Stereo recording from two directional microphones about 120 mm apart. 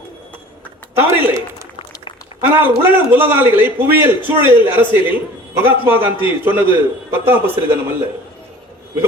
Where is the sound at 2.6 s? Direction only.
15° right (ahead or behind).